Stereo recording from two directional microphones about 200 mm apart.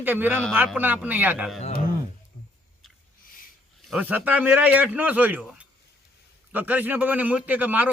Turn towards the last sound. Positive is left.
turn(degrees=-10)  # may be behind; listen again after turning